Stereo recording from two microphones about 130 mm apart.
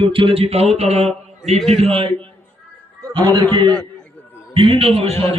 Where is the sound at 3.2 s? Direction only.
35° right (ahead or behind).